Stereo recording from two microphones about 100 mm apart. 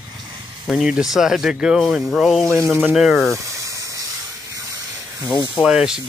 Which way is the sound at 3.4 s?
30° right (ahead or behind).